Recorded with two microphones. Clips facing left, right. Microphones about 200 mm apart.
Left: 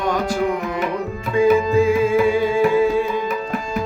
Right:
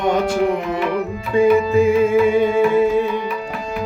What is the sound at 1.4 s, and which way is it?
Music, 20° right (ahead or behind).